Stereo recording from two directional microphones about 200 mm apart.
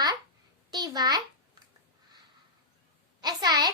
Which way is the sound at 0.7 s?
20° right (ahead or behind).